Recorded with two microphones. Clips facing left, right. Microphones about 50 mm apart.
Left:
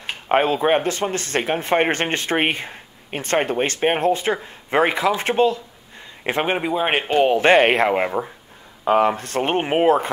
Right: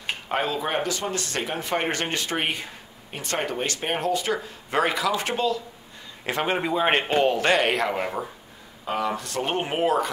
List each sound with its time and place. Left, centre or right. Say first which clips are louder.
0.3 s speech: left 9 dB; left
6.6 s speech: left 1 dB; centre
7.2 s speech: left 9 dB; left